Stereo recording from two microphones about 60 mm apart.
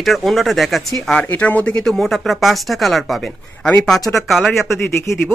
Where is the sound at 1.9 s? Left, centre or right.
Centre.